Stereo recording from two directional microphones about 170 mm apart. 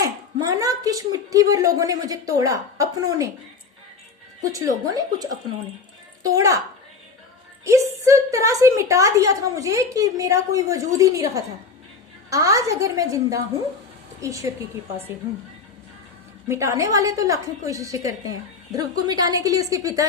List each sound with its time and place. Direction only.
0.0 s a sound: 20° right (ahead or behind)
4.4 s a woman's voice: 20° right (ahead or behind)
7.6 s a woman's voice: 20° right (ahead or behind)
16.5 s a woman's voice: 15° right (ahead or behind)